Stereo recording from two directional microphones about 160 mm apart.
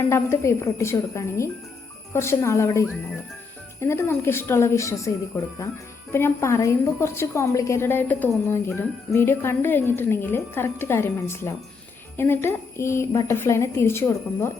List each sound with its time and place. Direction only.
0.0 s speech: 15° left (ahead or behind)